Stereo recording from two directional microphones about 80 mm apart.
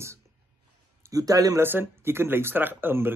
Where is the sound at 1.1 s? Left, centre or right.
Right.